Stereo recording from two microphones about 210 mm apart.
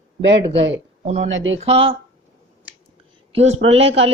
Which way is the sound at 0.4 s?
25° right (ahead or behind).